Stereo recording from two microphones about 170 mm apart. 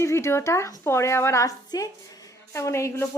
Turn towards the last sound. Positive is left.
turn(degrees=15)  # may be behind; listen again after turning